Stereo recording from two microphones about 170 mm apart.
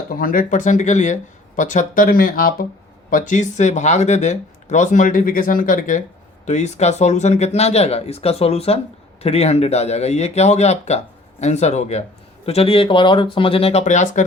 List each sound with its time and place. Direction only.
0.2 s speech: 55° left (ahead or behind)